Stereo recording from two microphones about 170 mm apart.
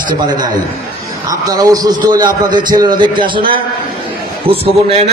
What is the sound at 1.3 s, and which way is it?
A man's voice, 20° right (ahead or behind).